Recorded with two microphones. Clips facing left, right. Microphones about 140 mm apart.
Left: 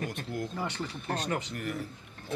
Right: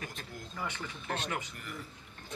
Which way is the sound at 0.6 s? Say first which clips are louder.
Left 5 dB; 35° left (ahead or behind).